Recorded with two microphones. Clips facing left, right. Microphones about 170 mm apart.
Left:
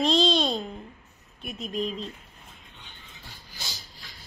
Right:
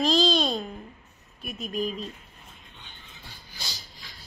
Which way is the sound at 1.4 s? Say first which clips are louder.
Even; 25° left (ahead or behind).